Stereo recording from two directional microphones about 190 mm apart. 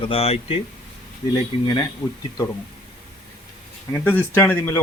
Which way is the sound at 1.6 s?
20° left (ahead or behind).